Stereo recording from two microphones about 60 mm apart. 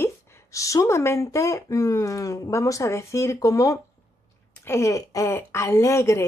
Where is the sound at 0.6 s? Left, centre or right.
Left.